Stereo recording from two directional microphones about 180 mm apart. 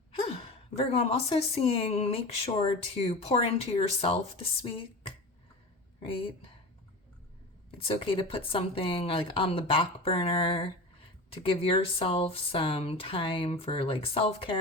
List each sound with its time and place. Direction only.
0.9 s speech: 35° left (ahead or behind)
7.8 s speech: 30° left (ahead or behind)